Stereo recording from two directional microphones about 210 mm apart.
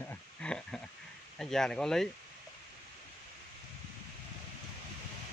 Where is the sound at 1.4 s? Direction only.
Centre (ahead or behind).